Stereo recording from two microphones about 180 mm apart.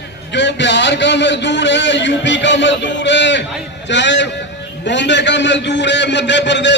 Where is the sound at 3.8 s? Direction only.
80° left.